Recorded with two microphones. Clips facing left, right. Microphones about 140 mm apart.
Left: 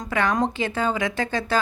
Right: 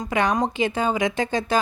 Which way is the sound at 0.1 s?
15° right (ahead or behind).